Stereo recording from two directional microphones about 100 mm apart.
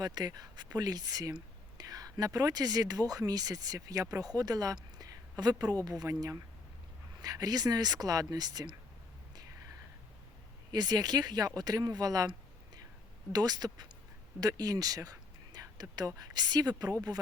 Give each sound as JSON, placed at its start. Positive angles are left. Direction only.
{"t": 0.0, "sound": "speech", "side_deg": -45}
{"t": 10.7, "sound": "speech", "side_deg": -40}